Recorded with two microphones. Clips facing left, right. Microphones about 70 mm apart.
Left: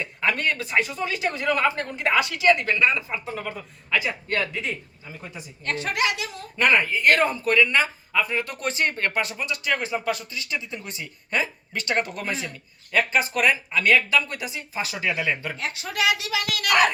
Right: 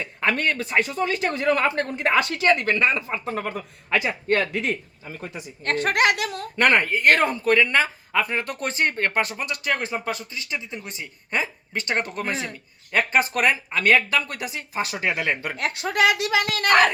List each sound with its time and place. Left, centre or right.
0.3 s speech: right
4.5 s speech: right